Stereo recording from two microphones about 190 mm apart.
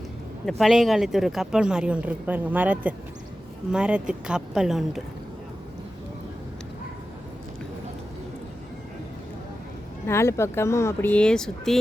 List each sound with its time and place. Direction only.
0.4 s speech: centre (ahead or behind)
10.1 s speech: 15° left (ahead or behind)